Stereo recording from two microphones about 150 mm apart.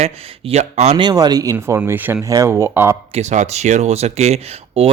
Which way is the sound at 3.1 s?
50° right (ahead or behind).